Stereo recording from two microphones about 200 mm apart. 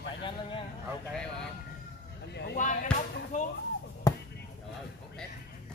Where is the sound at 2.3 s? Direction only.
55° left (ahead or behind).